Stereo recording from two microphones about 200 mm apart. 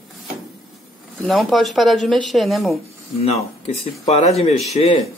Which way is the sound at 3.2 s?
30° left (ahead or behind).